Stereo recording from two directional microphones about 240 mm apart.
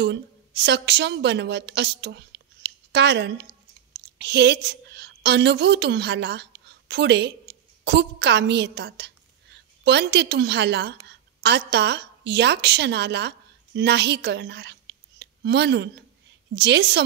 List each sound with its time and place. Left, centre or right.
0.0 s a woman's voice: right